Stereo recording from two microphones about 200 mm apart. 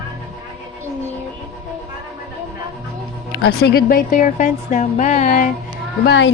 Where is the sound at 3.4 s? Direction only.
55° left (ahead or behind); by 5.4 s 40° left (ahead or behind).